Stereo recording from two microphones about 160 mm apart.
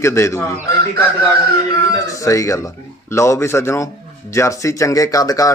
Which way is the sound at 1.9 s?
20° left (ahead or behind).